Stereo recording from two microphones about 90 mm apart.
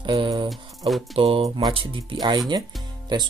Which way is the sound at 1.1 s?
90° right.